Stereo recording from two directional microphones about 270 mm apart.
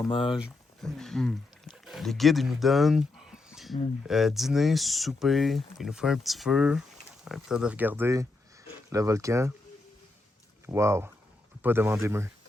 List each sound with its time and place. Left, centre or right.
0.1 s speech: centre
0.3 s speech: centre
3.5 s a sound: centre
4.0 s speech: centre
10.7 s speech: centre